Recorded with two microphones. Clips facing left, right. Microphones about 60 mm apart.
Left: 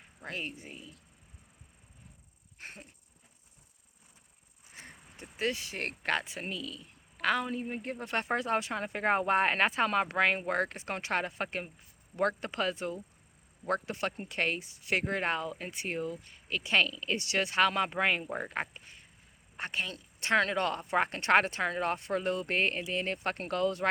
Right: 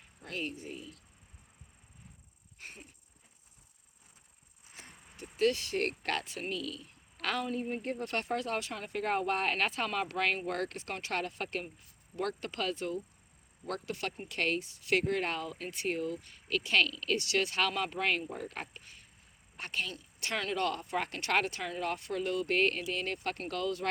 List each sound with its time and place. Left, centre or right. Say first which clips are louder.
0.2 s speech: even; left
2.6 s wheeze: left 2 dB; left
5.2 s speech: right 4 dB; centre